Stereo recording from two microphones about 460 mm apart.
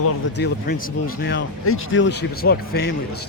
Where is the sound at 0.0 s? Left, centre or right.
Left.